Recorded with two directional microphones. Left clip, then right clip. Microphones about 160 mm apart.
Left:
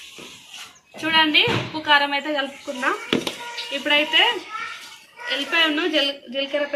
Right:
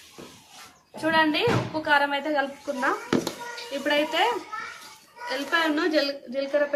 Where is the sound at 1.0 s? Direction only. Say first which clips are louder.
Left 5 dB; 20° right (ahead or behind).